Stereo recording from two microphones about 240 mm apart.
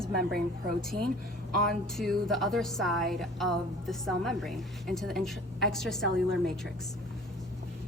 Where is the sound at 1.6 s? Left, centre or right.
Centre.